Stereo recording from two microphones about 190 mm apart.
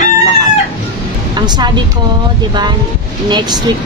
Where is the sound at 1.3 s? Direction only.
20° right (ahead or behind).